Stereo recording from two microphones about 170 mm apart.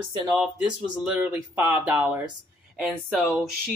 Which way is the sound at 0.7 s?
5° right (ahead or behind).